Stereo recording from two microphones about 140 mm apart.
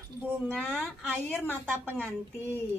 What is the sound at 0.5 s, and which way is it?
Speech, 5° left (ahead or behind).